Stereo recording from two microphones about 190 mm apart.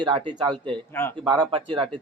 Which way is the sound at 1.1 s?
25° right (ahead or behind).